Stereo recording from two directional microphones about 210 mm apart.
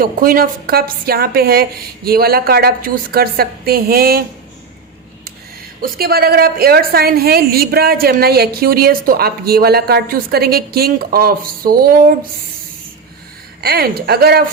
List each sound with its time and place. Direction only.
0.0 s a woman's voice: 45° right (ahead or behind)
5.8 s a woman's voice: 45° right (ahead or behind)
13.6 s a woman's voice: 50° right (ahead or behind)